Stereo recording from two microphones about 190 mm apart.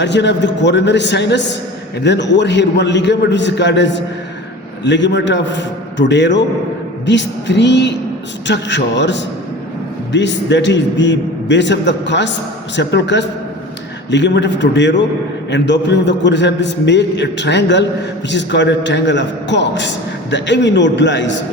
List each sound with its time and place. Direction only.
0.0 s a man's voice: 65° left (ahead or behind)